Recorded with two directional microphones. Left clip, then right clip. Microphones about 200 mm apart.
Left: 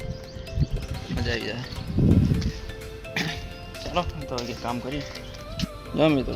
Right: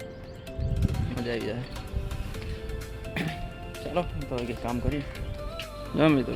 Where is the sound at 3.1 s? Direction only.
5° right (ahead or behind).